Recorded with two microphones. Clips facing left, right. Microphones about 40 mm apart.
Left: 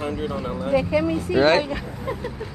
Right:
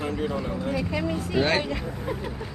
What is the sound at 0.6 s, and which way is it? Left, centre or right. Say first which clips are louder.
Speech: left 10 dB; left.